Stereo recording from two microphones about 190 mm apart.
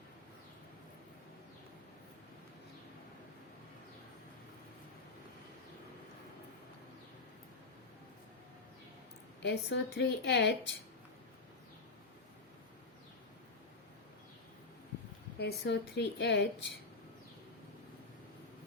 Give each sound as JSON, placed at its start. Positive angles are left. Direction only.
{"t": 9.4, "sound": "a woman's voice", "side_deg": 60}
{"t": 15.4, "sound": "a woman's voice", "side_deg": 60}